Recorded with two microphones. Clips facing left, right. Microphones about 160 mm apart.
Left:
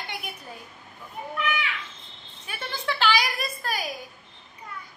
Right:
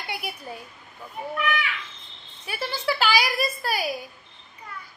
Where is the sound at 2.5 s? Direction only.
10° right (ahead or behind).